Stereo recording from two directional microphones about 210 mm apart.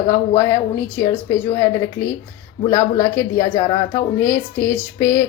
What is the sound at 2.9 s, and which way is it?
Speech, 15° left (ahead or behind).